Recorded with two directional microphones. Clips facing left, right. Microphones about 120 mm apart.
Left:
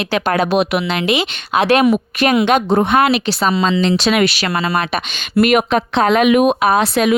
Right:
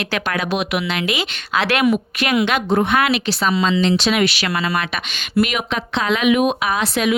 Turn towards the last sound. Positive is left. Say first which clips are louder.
# left 5 dB
turn(degrees=50)  # may be behind; listen again after turning